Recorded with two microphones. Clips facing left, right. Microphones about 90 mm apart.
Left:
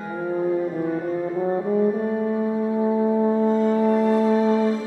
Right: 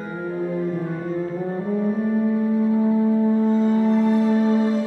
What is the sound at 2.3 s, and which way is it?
Music, 20° left (ahead or behind).